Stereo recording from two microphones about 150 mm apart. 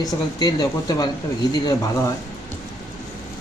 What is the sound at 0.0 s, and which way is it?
Speech, 25° left (ahead or behind).